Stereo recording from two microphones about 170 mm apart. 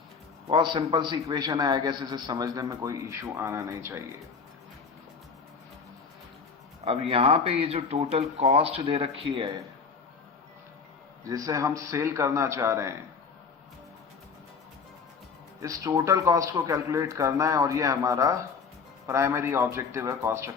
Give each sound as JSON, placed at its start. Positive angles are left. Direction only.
{"t": 0.4, "sound": "a man's voice", "side_deg": -25}
{"t": 6.8, "sound": "speech", "side_deg": -35}
{"t": 11.2, "sound": "a man's voice", "side_deg": -20}
{"t": 15.6, "sound": "a man's voice", "side_deg": -20}